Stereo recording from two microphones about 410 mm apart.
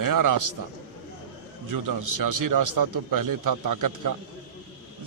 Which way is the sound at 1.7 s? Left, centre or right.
Right.